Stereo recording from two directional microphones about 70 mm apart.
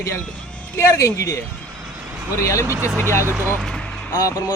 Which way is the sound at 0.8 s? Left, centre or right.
Left.